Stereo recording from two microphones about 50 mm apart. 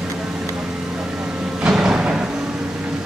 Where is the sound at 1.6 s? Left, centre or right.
Centre.